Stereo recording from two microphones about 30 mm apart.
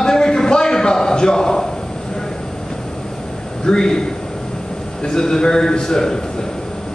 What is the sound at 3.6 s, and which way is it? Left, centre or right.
A man's voice, left.